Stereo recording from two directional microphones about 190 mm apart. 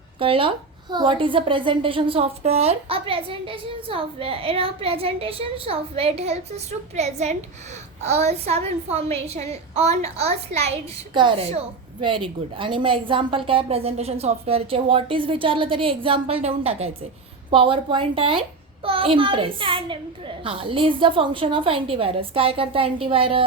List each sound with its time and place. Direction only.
0.2 s a woman's voice: 30° right (ahead or behind)